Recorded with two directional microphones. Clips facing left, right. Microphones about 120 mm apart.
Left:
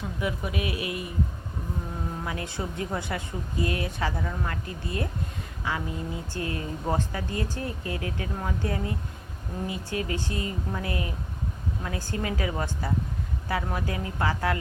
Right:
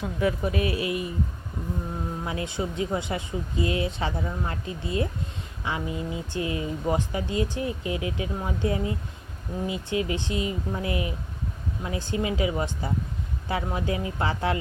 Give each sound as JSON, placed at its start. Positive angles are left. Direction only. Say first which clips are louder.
{"t": 0.4, "sound": "speech", "louder": "right 4 dB", "side_deg": -35}
{"t": 2.2, "sound": "speech", "louder": "right 5 dB", "side_deg": -20}